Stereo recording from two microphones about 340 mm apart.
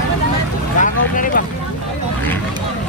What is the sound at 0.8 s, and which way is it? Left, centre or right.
Vehicle, left.